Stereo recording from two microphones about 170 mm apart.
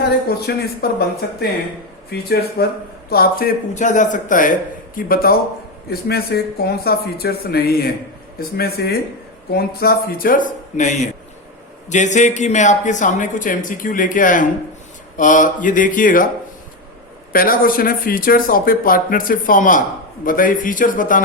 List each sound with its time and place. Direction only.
0.3 s speech: 65° left (ahead or behind)
17.3 s speech: 55° left (ahead or behind)